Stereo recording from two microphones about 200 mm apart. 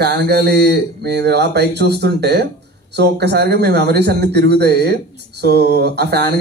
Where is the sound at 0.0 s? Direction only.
55° right (ahead or behind).